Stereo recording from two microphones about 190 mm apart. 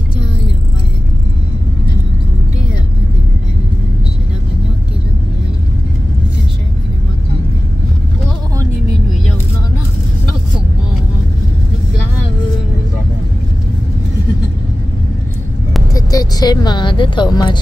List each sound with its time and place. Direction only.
15.9 s speech: 20° left (ahead or behind)